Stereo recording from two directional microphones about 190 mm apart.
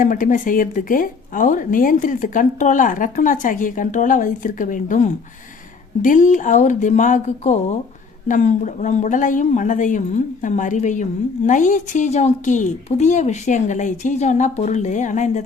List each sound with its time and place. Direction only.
0.0 s speech: 45° left (ahead or behind)